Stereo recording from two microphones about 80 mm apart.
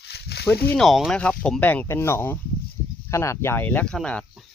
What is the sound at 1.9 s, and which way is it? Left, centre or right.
Speech, left.